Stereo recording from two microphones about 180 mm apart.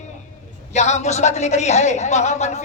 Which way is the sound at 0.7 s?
40° left (ahead or behind).